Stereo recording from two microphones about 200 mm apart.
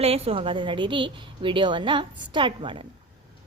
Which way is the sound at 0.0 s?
30° right (ahead or behind).